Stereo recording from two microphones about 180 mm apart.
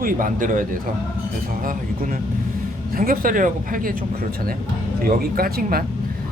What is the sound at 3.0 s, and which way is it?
Speech, 50° right (ahead or behind).